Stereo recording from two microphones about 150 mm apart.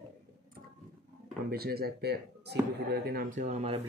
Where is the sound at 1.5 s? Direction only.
90° right; by 3.7 s 50° right (ahead or behind).